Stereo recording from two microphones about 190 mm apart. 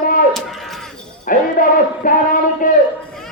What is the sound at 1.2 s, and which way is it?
A man's voice, 45° left (ahead or behind).